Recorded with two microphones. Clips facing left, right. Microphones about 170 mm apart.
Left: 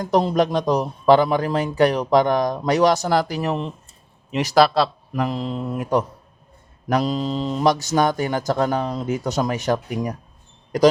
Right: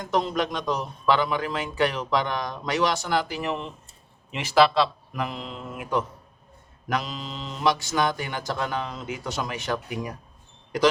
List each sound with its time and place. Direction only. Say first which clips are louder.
0.0 s a man's voice: left 7 dB; 35° left (ahead or behind)